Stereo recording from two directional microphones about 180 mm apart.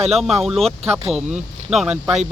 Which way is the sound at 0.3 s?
Centre (ahead or behind).